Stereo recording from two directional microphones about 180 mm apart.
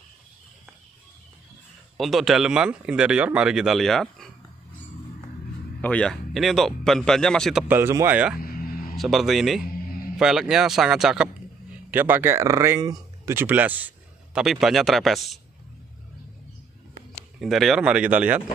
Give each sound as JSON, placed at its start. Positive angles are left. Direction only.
{"t": 2.0, "sound": "speech", "side_deg": 0}
{"t": 5.8, "sound": "speech", "side_deg": 5}
{"t": 7.6, "sound": "speech", "side_deg": -10}
{"t": 8.4, "sound": "music", "side_deg": 55}
{"t": 8.9, "sound": "speech", "side_deg": 0}
{"t": 17.4, "sound": "speech", "side_deg": 0}